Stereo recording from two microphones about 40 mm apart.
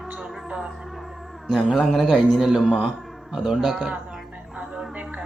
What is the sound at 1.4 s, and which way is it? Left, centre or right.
Speech, centre.